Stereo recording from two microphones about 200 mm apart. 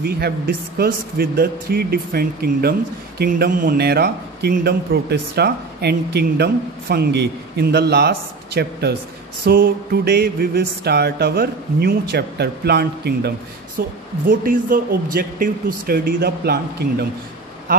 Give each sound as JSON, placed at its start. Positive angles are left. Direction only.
{"t": 0.0, "sound": "a man's voice", "side_deg": -50}
{"t": 13.7, "sound": "a man's voice", "side_deg": -45}